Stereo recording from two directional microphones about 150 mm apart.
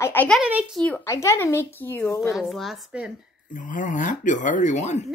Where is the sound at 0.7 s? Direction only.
10° left (ahead or behind).